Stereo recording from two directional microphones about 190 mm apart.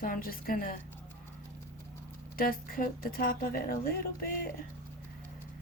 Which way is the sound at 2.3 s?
50° left (ahead or behind).